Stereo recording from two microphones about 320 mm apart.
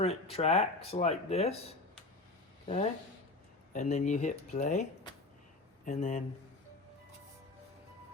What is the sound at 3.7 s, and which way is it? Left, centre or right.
Speech, left.